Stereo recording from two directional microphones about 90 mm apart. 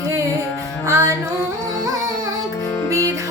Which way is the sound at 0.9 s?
35° right (ahead or behind).